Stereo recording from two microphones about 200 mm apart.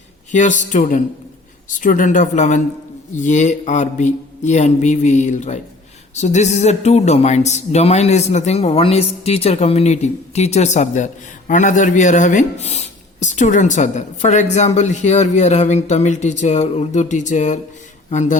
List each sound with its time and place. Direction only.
0.3 s speech: 40° left (ahead or behind)